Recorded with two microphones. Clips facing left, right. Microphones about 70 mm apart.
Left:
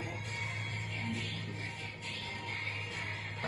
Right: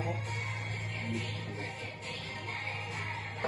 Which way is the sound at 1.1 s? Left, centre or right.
Right.